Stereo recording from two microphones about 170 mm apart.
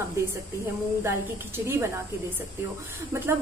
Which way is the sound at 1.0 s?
15° right (ahead or behind).